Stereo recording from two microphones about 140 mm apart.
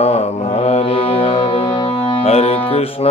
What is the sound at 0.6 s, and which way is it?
Music, 45° left (ahead or behind).